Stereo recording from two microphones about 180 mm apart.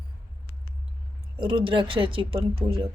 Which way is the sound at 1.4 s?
30° right (ahead or behind).